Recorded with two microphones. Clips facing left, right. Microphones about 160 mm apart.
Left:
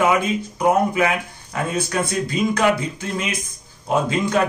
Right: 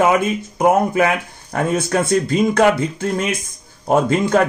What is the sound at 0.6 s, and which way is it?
A man's voice, 45° right (ahead or behind).